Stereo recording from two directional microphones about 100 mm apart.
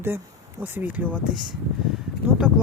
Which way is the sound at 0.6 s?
20° right (ahead or behind).